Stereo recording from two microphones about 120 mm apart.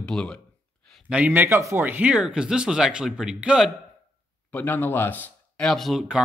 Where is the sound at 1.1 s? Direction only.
15° right (ahead or behind).